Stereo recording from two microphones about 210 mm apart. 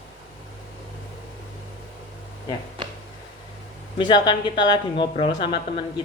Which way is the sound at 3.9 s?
20° left (ahead or behind).